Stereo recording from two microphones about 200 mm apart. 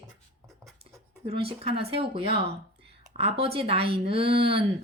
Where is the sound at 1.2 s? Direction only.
30° right (ahead or behind).